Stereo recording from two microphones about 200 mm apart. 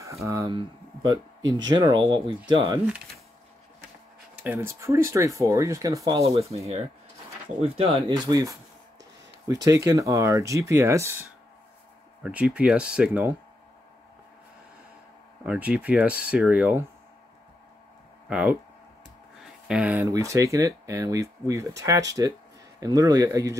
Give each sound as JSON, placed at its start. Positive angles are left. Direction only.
{"t": 0.0, "sound": "speech", "side_deg": -15}
{"t": 4.4, "sound": "speech", "side_deg": -10}
{"t": 7.6, "sound": "speech", "side_deg": -30}
{"t": 15.4, "sound": "speech", "side_deg": -5}
{"t": 18.3, "sound": "speech", "side_deg": -5}